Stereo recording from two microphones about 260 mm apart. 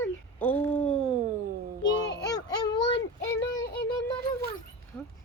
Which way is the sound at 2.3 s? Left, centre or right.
Centre.